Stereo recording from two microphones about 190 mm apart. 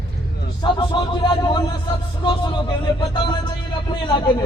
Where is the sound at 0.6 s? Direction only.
25° left (ahead or behind).